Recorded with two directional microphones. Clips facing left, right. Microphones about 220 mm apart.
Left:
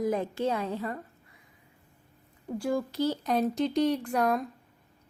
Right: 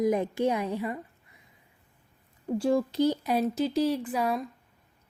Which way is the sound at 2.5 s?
25° right (ahead or behind).